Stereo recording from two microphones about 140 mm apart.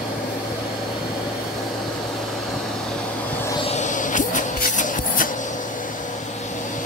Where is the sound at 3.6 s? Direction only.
60° left (ahead or behind).